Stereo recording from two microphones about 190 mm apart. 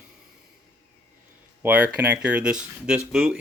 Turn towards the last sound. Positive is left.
turn(degrees=-5)  # may be behind; listen again after turning